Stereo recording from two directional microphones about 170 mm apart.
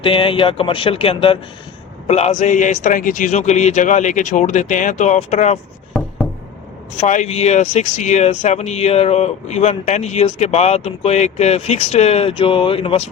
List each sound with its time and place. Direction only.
0.0 s a man's voice: 30° left (ahead or behind)
6.9 s speech: 40° left (ahead or behind)